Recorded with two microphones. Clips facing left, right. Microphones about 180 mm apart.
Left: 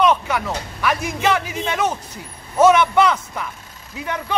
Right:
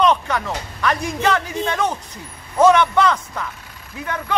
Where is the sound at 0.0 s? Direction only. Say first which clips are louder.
Even; 10° left (ahead or behind).